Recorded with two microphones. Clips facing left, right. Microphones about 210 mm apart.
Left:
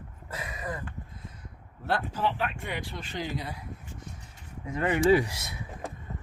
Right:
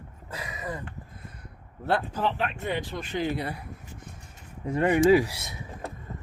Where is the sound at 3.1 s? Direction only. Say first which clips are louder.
Right 6 dB; 60° right (ahead or behind).